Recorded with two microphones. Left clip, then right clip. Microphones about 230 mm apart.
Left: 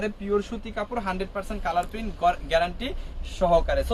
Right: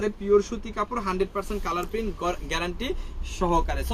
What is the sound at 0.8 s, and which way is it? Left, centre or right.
Speech, centre.